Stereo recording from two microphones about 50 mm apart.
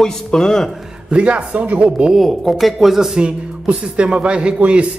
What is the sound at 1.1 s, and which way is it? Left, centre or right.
Speech, right.